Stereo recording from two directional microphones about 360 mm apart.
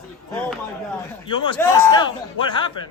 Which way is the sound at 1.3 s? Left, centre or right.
Centre.